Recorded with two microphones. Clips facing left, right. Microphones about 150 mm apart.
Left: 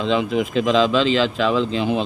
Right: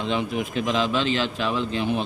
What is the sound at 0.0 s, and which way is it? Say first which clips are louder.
Speech: left 6 dB; 90° left.